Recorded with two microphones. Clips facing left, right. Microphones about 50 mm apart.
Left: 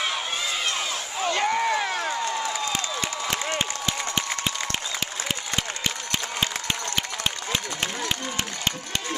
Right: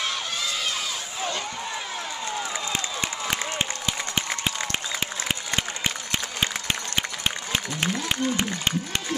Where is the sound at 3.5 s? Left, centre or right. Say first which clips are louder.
Left 1 dB; right.